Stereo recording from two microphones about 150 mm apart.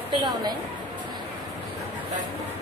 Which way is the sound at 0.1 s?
30° right (ahead or behind).